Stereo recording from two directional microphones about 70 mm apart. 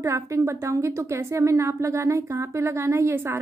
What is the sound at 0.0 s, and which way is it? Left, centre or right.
A woman's voice, right.